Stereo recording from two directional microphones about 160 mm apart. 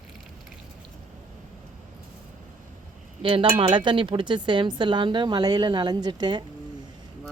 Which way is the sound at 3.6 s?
30° right (ahead or behind).